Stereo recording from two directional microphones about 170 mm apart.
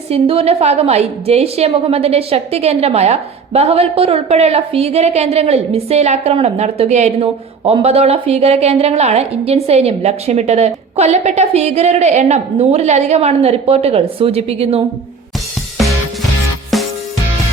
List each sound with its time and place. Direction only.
0.1 s a woman's voice: 35° right (ahead or behind)
16.7 s music: centre (ahead or behind)